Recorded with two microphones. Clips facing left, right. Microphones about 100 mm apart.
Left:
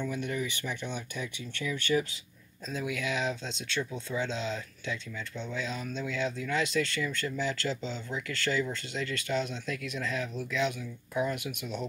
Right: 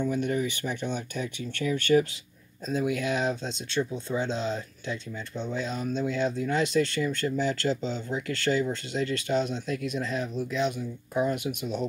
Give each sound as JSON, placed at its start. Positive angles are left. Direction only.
{"t": 0.0, "sound": "speech", "side_deg": -40}
{"t": 10.8, "sound": "speech", "side_deg": -35}